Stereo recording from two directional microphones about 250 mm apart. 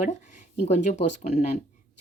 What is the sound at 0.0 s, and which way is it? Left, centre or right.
Speech, left.